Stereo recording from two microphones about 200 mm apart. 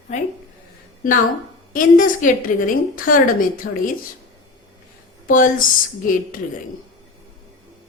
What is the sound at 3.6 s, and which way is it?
Speech, 65° left (ahead or behind).